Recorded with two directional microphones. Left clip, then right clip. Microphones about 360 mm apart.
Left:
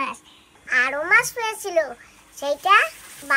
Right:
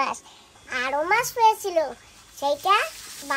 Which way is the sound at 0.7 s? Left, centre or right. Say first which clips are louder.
Left 4 dB; centre.